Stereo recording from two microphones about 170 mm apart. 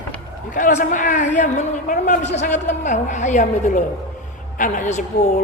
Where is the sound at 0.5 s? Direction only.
45° left (ahead or behind).